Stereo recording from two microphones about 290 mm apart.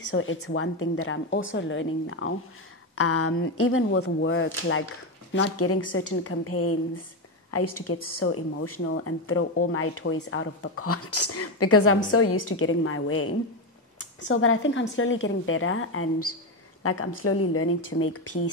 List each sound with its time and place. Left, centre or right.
0.1 s a woman's voice: left